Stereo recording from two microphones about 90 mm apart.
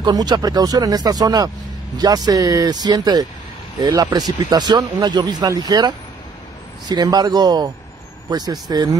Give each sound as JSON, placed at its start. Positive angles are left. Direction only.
{"t": 0.0, "sound": "speech", "side_deg": -50}
{"t": 4.4, "sound": "speech", "side_deg": -55}